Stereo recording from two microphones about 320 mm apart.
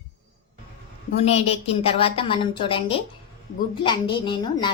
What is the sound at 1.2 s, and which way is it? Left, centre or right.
A woman's voice, centre.